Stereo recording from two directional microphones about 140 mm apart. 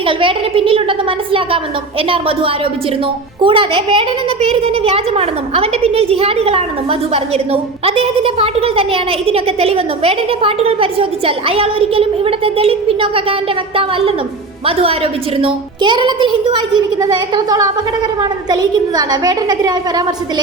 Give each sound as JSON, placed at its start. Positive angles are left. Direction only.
{"t": 0.1, "sound": "a woman's voice", "side_deg": -40}
{"t": 15.4, "sound": "a woman's voice", "side_deg": -35}